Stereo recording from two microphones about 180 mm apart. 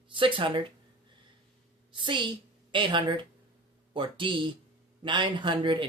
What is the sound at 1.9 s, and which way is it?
A woman's voice, 25° right (ahead or behind).